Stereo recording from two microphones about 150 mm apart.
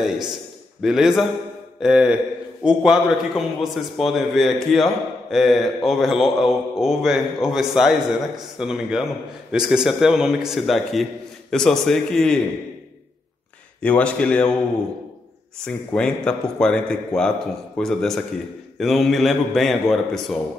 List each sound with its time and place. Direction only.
0.0 s a man's voice: centre (ahead or behind)
13.7 s a man's voice: 10° left (ahead or behind)
15.6 s a man's voice: 5° left (ahead or behind)